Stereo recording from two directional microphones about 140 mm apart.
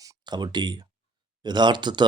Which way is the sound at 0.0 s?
30° right (ahead or behind).